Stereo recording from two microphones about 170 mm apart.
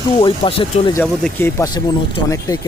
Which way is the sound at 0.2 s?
30° left (ahead or behind).